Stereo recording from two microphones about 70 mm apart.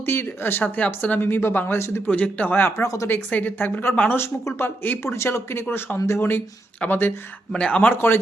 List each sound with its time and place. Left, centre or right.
0.0 s a woman's voice: left
2.6 s speech: left
3.1 s a woman's voice: left
4.2 s speech: left
5.1 s a woman's voice: left
7.5 s a man's voice: centre
7.9 s speech: left